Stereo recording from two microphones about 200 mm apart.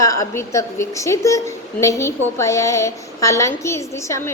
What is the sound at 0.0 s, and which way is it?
A woman's voice, 15° left (ahead or behind).